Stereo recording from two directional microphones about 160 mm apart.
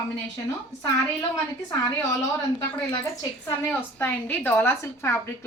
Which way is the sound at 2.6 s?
20° left (ahead or behind).